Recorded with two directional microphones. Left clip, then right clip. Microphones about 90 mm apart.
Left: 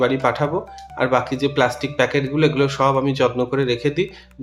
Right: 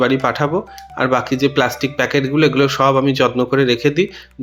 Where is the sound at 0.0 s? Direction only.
40° right (ahead or behind).